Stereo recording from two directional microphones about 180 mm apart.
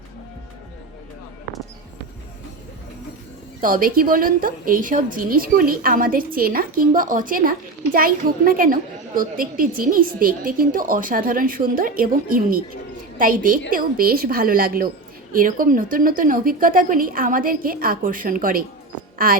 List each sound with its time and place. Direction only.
3.6 s a woman's voice: 50° right (ahead or behind)